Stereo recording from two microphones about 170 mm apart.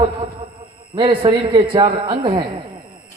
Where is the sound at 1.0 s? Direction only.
30° right (ahead or behind).